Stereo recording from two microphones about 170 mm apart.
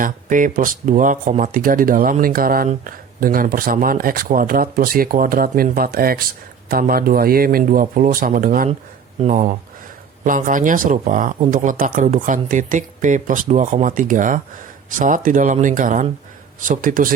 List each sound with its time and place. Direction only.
0.0 s speech: 50° right (ahead or behind)